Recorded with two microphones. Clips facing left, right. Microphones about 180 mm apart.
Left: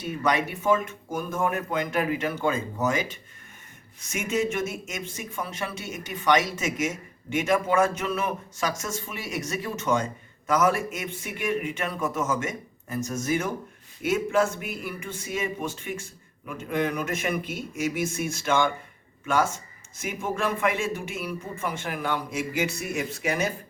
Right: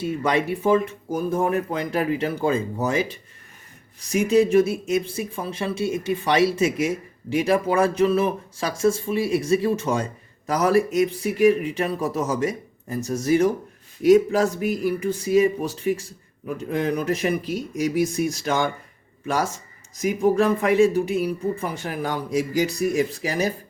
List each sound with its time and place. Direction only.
0.0 s speech: 30° right (ahead or behind)